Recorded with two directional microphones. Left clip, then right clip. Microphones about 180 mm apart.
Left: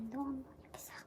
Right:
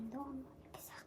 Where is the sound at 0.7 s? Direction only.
10° left (ahead or behind).